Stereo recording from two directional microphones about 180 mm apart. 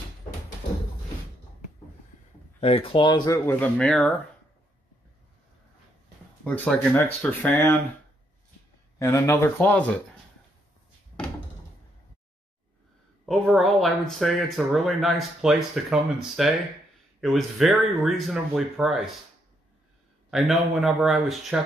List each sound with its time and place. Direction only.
2.6 s speech: 30° left (ahead or behind); by 4.2 s 5° left (ahead or behind)
6.4 s speech: 10° left (ahead or behind)
8.9 s speech: 15° left (ahead or behind)
13.2 s speech: centre (ahead or behind)
20.2 s speech: centre (ahead or behind)